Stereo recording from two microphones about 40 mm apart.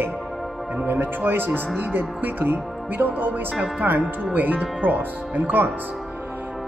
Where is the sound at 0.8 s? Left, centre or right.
Right.